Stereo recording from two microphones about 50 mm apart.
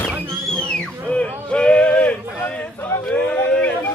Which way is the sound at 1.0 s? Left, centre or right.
Left.